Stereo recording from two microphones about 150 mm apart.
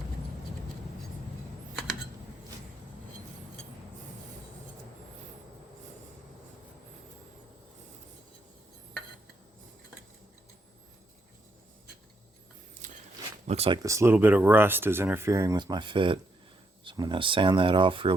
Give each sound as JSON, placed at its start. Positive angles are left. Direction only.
{"t": 12.8, "sound": "a sound", "side_deg": -60}
{"t": 13.5, "sound": "speech", "side_deg": -40}
{"t": 13.8, "sound": "speech", "side_deg": -20}